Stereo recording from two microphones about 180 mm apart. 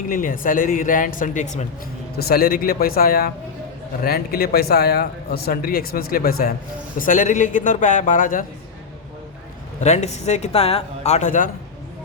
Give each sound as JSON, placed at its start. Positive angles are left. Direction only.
{"t": 0.1, "sound": "speech", "side_deg": 50}
{"t": 2.1, "sound": "speech", "side_deg": 55}
{"t": 7.0, "sound": "speech", "side_deg": 45}
{"t": 9.8, "sound": "speech", "side_deg": 40}